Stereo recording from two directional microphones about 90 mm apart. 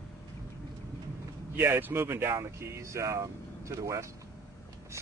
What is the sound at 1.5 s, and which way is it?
Speech, 25° right (ahead or behind).